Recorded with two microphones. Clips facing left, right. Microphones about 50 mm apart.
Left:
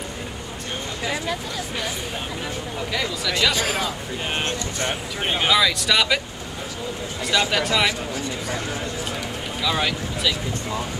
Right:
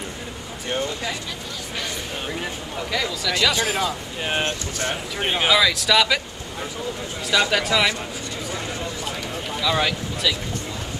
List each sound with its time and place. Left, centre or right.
2.9 s speech: centre
7.5 s speech: centre
9.6 s speech: centre